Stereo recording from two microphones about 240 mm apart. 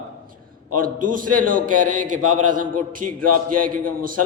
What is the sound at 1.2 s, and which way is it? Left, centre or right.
A man's voice, right.